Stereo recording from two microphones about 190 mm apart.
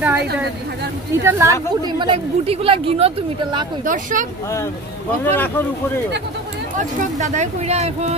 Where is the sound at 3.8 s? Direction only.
45° right (ahead or behind).